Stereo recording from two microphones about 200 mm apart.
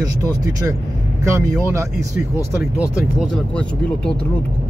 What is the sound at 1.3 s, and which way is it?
Speech, 15° right (ahead or behind).